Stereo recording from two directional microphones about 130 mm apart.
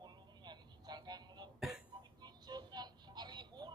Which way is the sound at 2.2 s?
35° right (ahead or behind).